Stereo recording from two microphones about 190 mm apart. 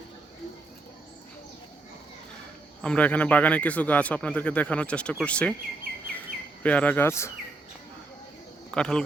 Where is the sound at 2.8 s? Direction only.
5° left (ahead or behind).